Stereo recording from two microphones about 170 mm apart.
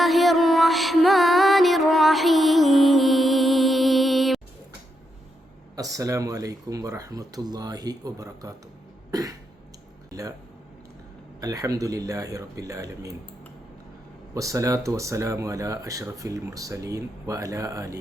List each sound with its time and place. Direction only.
0.0 s music: centre (ahead or behind)
5.7 s speech: 20° right (ahead or behind)
11.3 s speech: 20° right (ahead or behind)
14.3 s speech: 20° right (ahead or behind)